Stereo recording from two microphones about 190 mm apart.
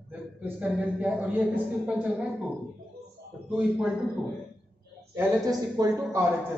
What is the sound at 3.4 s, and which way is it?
Speech, 5° right (ahead or behind).